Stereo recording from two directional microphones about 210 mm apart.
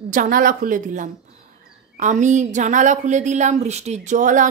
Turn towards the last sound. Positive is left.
turn(degrees=-40)  # may be behind; listen again after turning